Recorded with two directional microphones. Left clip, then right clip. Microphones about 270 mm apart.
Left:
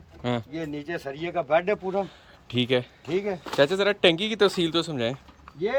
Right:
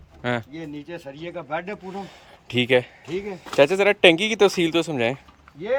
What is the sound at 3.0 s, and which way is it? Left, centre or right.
Speech, centre.